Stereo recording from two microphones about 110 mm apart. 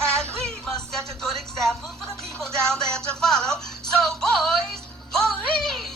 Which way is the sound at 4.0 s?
5° left (ahead or behind).